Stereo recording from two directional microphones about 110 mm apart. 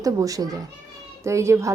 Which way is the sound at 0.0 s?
30° right (ahead or behind).